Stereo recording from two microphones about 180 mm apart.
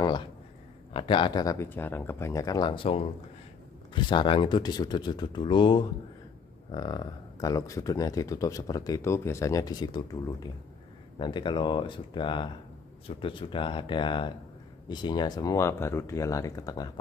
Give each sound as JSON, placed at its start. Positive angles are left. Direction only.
{"t": 0.9, "sound": "speech", "side_deg": 25}